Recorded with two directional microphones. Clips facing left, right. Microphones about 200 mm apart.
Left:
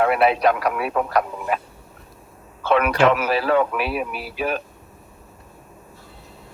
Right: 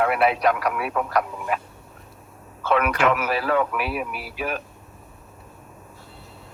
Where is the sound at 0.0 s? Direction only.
30° left (ahead or behind).